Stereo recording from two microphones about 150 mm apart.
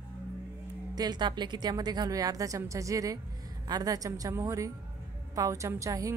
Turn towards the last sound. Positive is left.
turn(degrees=-20)  # may be behind; listen again after turning